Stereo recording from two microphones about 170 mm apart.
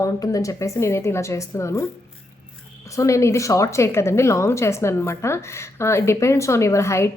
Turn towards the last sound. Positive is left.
turn(degrees=15)  # may be behind; listen again after turning